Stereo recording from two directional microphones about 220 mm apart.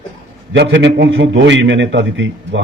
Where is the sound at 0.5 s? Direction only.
50° right (ahead or behind).